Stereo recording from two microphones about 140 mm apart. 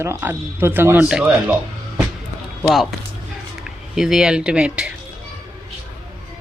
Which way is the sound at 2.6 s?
Centre (ahead or behind).